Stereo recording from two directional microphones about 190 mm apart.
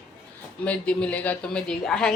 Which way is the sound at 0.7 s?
5° left (ahead or behind).